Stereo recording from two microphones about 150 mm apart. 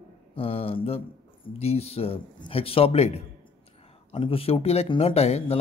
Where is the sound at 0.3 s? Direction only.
40° left (ahead or behind).